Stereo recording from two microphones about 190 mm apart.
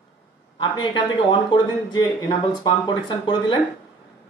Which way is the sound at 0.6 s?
25° left (ahead or behind).